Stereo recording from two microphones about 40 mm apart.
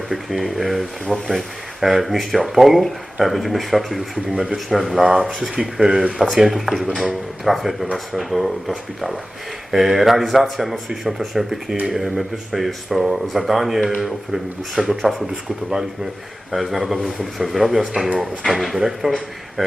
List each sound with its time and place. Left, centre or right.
0.1 s speech: centre
4.3 s speech: centre
4.5 s speech: centre
9.7 s speech: centre
16.5 s speech: centre